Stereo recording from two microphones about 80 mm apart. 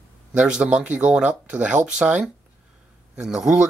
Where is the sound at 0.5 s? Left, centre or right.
Centre.